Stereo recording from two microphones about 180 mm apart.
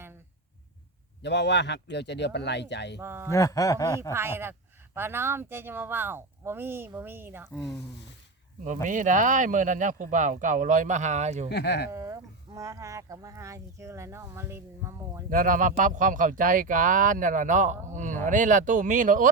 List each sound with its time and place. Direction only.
1.2 s speech: 75° left (ahead or behind)
3.0 s speech: 15° right (ahead or behind)
3.3 s speech: 15° left (ahead or behind)
4.1 s speech: 15° right (ahead or behind)
7.5 s speech: centre (ahead or behind)
8.6 s speech: 45° right (ahead or behind)
11.4 s speech: 70° left (ahead or behind)
11.9 s speech: 15° right (ahead or behind)
15.3 s speech: 50° right (ahead or behind)